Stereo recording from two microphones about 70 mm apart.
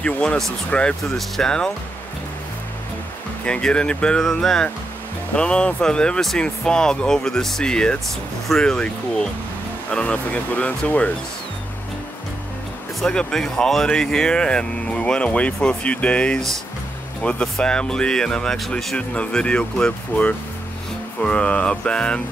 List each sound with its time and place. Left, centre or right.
0.0 s speech: centre
1.1 s speech: centre
3.4 s speech: centre
13.0 s speech: centre
18.9 s speech: centre